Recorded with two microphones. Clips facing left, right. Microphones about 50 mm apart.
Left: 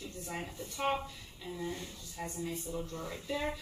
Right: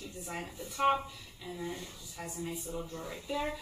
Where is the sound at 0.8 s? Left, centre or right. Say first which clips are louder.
Right 5 dB; centre.